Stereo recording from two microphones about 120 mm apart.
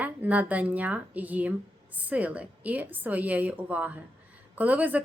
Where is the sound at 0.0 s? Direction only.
15° right (ahead or behind).